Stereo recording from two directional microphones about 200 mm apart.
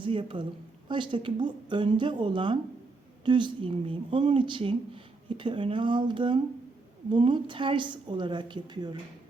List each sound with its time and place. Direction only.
0.0 s speech: 25° right (ahead or behind)